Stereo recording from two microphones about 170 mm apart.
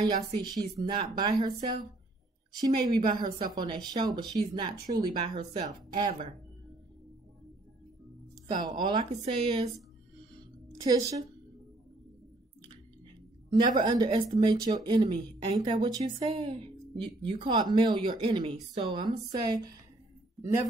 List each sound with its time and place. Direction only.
0.0 s speech: 25° right (ahead or behind)
8.5 s speech: 25° right (ahead or behind)
10.8 s a woman's voice: 20° right (ahead or behind)
13.5 s speech: 25° right (ahead or behind)
16.0 s speech: 40° right (ahead or behind)